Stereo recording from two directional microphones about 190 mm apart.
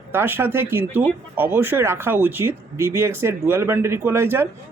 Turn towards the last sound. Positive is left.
turn(degrees=-15)  # may be behind; listen again after turning